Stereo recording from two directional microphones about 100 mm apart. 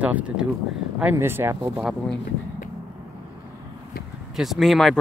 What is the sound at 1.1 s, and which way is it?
Speech, 25° right (ahead or behind).